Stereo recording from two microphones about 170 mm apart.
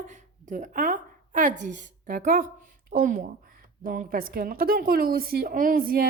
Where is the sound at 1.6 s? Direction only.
50° right (ahead or behind).